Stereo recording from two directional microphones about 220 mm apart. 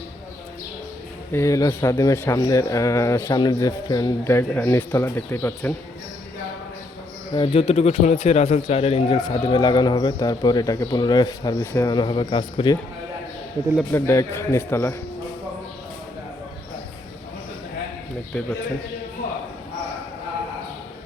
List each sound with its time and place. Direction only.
1.3 s speech: 15° left (ahead or behind)
7.3 s a man's voice: 25° left (ahead or behind)
13.9 s speech: 10° left (ahead or behind)
18.3 s a man's voice: 5° left (ahead or behind)